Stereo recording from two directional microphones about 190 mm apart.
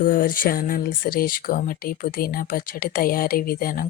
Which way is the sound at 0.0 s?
45° left (ahead or behind).